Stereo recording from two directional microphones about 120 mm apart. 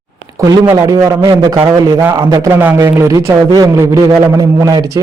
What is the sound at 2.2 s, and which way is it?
Speech, 45° right (ahead or behind).